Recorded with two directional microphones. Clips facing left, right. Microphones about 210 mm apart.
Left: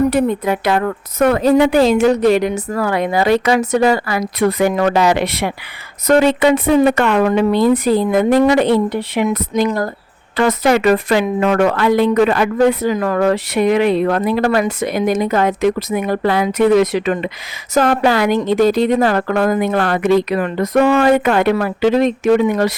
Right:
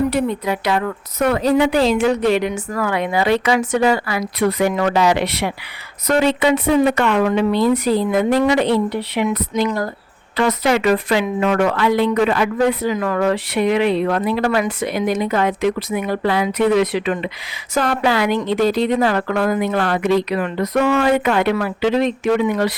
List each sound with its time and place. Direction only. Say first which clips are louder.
0.1 s a woman's voice: left 4 dB; 50° left (ahead or behind)